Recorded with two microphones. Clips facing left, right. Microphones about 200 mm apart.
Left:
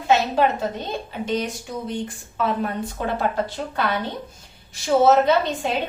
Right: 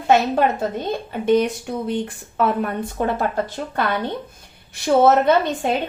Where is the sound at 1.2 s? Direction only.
55° right (ahead or behind).